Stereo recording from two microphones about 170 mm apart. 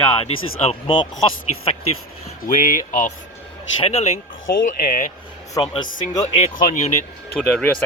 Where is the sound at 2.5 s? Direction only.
50° left (ahead or behind).